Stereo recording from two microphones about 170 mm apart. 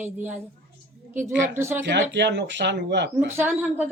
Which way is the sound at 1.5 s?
15° right (ahead or behind).